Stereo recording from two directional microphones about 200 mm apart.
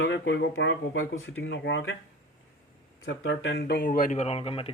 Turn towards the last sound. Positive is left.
turn(degrees=30)  # may be behind; listen again after turning